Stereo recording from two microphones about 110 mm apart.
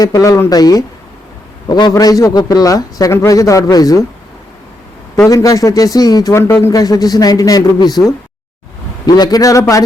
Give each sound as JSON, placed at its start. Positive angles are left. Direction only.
{"t": 0.0, "sound": "a man's voice", "side_deg": 30}
{"t": 5.3, "sound": "a man's voice", "side_deg": 35}
{"t": 9.0, "sound": "a man's voice", "side_deg": 35}